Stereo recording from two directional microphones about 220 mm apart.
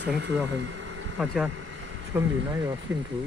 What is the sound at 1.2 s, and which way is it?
Speech, centre (ahead or behind).